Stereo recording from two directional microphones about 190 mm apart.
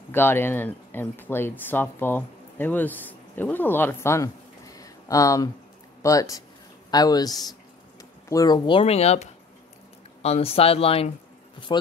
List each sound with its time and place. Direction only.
0.1 s speech: 10° left (ahead or behind)